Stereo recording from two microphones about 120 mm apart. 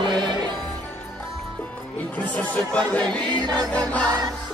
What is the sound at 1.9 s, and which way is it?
Music, 15° left (ahead or behind).